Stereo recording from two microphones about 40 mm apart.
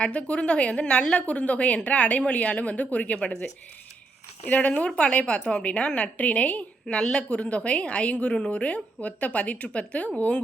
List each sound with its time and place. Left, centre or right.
0.0 s a woman's voice: left
4.4 s a woman's voice: left
6.8 s a woman's voice: centre